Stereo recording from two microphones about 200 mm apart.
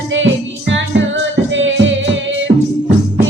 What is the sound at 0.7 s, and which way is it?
Music, 65° right (ahead or behind).